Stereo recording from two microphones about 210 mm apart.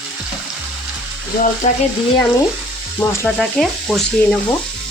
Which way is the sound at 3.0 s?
5° left (ahead or behind).